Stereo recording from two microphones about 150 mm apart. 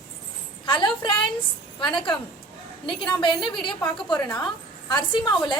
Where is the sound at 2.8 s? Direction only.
30° left (ahead or behind).